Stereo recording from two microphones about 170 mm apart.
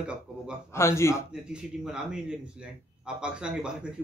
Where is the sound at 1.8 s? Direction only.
5° right (ahead or behind).